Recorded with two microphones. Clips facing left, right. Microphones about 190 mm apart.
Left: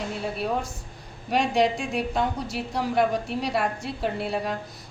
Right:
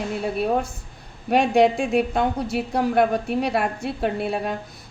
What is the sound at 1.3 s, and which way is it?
A woman's voice, 55° right (ahead or behind).